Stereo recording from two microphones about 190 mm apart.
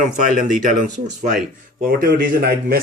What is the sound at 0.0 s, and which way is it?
Speech, 45° right (ahead or behind).